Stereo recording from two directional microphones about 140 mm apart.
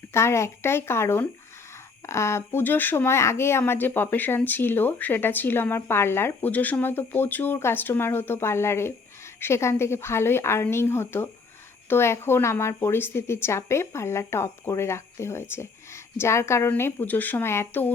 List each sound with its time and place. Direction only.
0.1 s a woman's voice: 20° left (ahead or behind)